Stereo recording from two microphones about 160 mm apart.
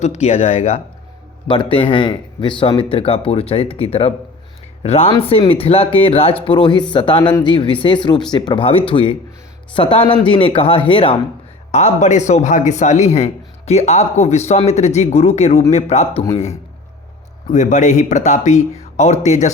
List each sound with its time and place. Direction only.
0.2 s a man's voice: 45° left (ahead or behind)
11.7 s a man's voice: 45° left (ahead or behind)
17.5 s a man's voice: 50° left (ahead or behind)